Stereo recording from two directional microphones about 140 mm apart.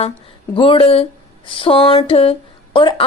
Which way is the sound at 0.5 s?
35° left (ahead or behind).